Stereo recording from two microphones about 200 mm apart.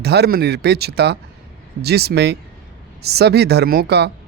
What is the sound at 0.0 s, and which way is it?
A man's voice, 55° right (ahead or behind).